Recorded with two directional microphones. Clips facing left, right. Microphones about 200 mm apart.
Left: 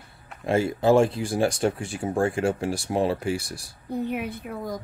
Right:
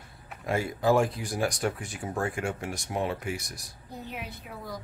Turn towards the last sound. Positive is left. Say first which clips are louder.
# left 8 dB
turn(degrees=50)  # may be behind; listen again after turning